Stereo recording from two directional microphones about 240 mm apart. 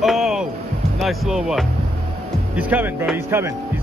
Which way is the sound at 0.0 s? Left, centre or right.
Centre.